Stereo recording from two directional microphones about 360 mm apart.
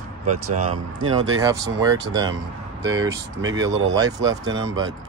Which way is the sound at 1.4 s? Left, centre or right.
Centre.